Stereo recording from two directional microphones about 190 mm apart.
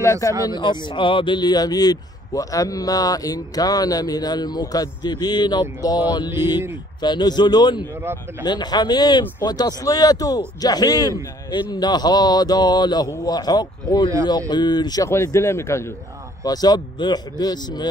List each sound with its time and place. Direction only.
0.0 s a man's voice: 15° left (ahead or behind)
7.9 s speech: 10° right (ahead or behind)
8.5 s a man's voice: 20° left (ahead or behind)